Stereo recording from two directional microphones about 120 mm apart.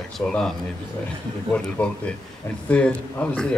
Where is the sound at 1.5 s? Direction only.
10° left (ahead or behind).